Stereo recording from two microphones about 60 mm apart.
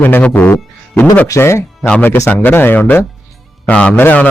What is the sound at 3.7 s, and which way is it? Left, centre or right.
Speech, left.